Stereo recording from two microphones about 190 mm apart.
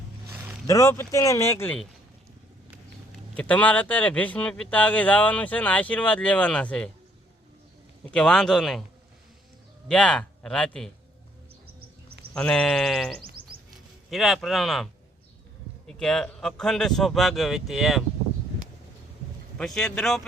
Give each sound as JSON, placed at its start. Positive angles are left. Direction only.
{"t": 0.7, "sound": "speech", "side_deg": 15}
{"t": 3.3, "sound": "speech", "side_deg": 10}
{"t": 8.0, "sound": "speech", "side_deg": 5}
{"t": 9.9, "sound": "speech", "side_deg": 5}
{"t": 11.6, "sound": "cricket", "side_deg": -55}
{"t": 12.3, "sound": "speech", "side_deg": 5}
{"t": 15.9, "sound": "speech", "side_deg": 5}
{"t": 19.5, "sound": "speech", "side_deg": 5}